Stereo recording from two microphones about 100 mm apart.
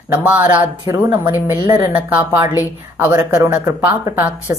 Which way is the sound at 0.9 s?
35° right (ahead or behind).